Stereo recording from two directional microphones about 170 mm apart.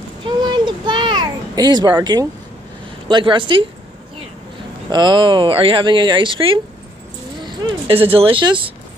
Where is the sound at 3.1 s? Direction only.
30° right (ahead or behind).